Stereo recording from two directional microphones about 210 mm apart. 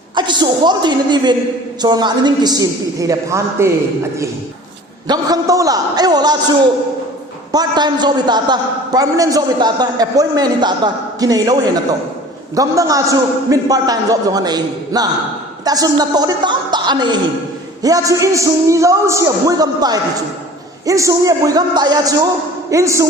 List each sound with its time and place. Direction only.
0.2 s a woman's voice: 20° right (ahead or behind)
5.0 s a man's voice: 20° right (ahead or behind)